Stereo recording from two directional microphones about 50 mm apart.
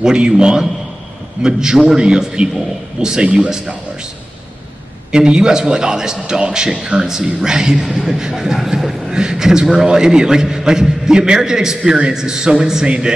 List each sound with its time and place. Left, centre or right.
0.0 s a man's voice: centre
5.1 s a man's voice: centre